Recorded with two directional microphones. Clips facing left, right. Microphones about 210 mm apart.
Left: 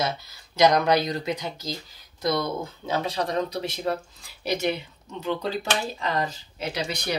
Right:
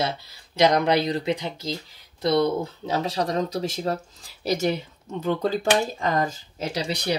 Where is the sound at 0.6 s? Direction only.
25° right (ahead or behind).